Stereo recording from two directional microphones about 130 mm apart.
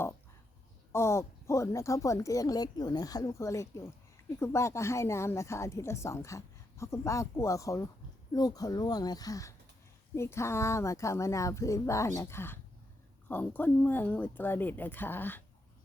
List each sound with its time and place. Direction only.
0.9 s a woman's voice: 20° left (ahead or behind)